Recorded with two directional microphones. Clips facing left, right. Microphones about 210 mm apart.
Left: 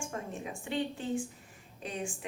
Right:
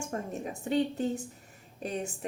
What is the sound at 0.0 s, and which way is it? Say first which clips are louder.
Speech: right 4 dB; 40° right (ahead or behind).